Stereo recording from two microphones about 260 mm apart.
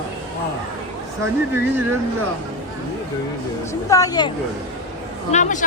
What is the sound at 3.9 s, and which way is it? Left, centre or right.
Speech, centre.